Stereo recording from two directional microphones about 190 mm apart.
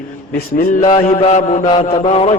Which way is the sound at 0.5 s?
50° left (ahead or behind).